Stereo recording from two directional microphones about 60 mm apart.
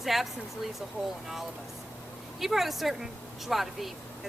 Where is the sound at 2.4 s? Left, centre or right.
Centre.